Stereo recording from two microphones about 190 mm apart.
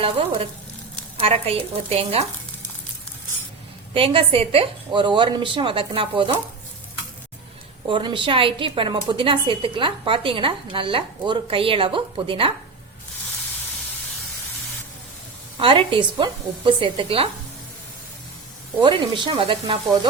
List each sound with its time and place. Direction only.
0.0 s a woman's voice: 30° right (ahead or behind)
3.9 s a woman's voice: 30° right (ahead or behind)
7.9 s a woman's voice: 25° right (ahead or behind)
15.5 s a woman's voice: 30° right (ahead or behind)
18.8 s a woman's voice: 25° right (ahead or behind)